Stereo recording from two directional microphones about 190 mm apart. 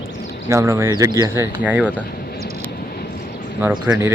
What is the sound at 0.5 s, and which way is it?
Speech, 15° right (ahead or behind).